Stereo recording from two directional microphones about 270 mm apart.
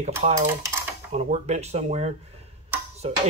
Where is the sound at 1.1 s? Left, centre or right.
Right.